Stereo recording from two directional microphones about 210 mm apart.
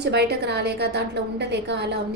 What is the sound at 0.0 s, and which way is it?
A woman's voice, 50° right (ahead or behind).